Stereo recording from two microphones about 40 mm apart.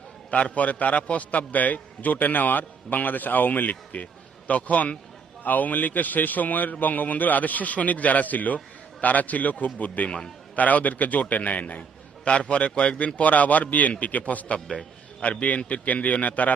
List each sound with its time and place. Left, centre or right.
0.3 s a man's voice: left
11.8 s a man's voice: left